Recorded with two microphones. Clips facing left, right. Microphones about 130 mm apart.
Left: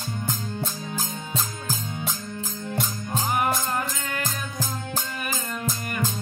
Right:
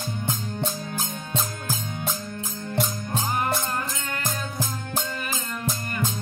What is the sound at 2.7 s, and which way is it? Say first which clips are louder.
Music: right 2 dB; 15° left (ahead or behind).